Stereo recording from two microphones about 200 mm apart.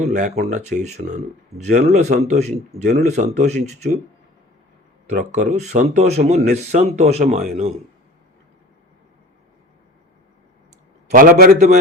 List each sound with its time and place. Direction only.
0.0 s speech: 35° right (ahead or behind)
5.0 s speech: 35° right (ahead or behind)
11.1 s a man's voice: 45° right (ahead or behind)